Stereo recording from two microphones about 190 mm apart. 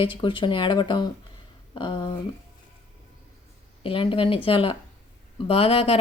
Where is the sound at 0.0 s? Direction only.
25° left (ahead or behind).